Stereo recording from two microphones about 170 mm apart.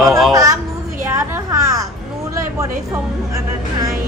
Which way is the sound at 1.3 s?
20° right (ahead or behind).